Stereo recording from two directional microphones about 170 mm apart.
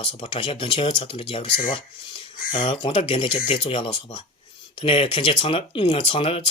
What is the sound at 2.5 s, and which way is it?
Speech, 30° left (ahead or behind).